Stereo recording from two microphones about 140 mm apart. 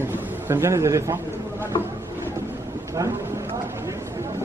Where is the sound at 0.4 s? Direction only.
20° right (ahead or behind).